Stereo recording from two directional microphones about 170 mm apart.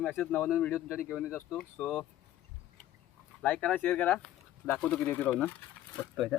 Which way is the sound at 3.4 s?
10° left (ahead or behind).